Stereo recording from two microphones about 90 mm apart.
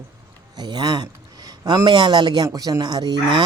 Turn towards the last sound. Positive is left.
turn(degrees=-60)  # may be behind; listen again after turning